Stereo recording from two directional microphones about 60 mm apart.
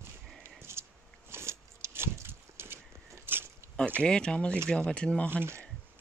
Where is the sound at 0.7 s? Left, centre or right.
Right.